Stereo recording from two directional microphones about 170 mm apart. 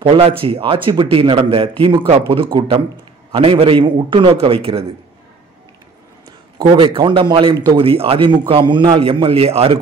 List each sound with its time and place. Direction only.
0.0 s speech: 35° right (ahead or behind)
6.6 s speech: 30° right (ahead or behind)